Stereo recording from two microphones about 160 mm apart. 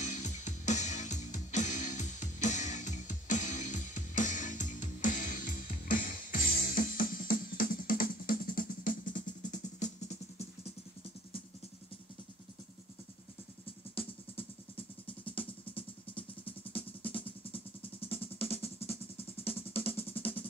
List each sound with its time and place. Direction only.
0.0 s music: 50° left (ahead or behind)
13.9 s music: 35° left (ahead or behind)
18.0 s drum: 35° left (ahead or behind)